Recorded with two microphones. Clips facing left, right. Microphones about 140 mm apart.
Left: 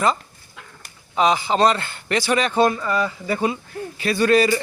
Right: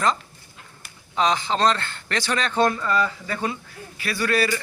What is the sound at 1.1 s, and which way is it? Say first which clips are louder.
A man's voice: left 3 dB; 10° left (ahead or behind).